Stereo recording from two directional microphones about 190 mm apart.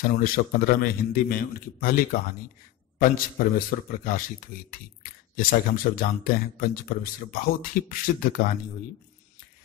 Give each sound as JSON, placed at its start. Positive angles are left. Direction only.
{"t": 0.2, "sound": "speech", "side_deg": 50}